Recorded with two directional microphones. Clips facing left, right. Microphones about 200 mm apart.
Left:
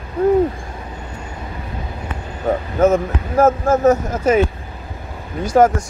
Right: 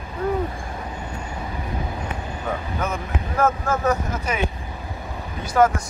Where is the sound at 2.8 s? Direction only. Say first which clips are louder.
Left 12 dB; 45° left (ahead or behind).